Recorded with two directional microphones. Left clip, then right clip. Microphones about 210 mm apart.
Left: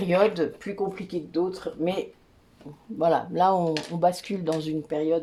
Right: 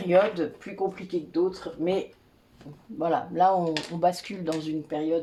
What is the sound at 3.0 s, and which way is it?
Speech, 40° left (ahead or behind).